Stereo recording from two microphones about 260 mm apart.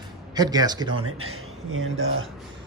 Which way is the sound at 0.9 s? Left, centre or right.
Right.